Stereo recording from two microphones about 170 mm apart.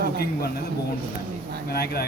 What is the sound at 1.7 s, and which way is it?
Speech, 65° left (ahead or behind).